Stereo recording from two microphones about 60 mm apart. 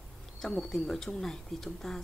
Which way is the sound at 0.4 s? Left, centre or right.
Centre.